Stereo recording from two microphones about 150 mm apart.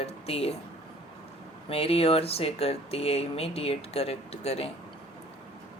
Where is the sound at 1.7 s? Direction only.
40° left (ahead or behind).